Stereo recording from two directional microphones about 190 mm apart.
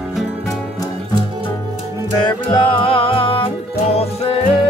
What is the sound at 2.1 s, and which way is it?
Music, 20° left (ahead or behind).